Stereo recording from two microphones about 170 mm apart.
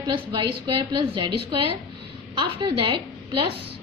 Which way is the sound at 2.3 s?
25° right (ahead or behind).